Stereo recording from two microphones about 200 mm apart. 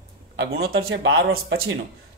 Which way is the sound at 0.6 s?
80° right.